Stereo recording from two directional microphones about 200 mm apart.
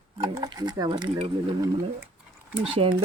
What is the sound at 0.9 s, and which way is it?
Speech, 30° right (ahead or behind).